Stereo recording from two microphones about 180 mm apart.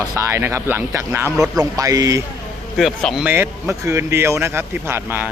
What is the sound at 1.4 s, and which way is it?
Speech, centre (ahead or behind).